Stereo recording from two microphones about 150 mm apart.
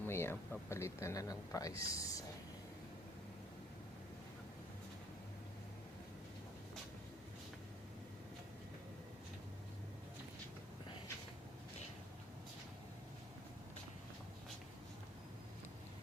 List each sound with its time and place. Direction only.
0.0 s speech: 15° left (ahead or behind)